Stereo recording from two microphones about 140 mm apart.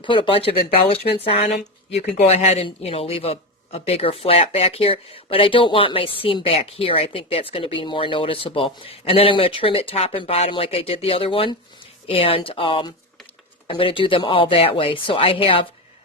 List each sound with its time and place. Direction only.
0.0 s speech: 35° left (ahead or behind)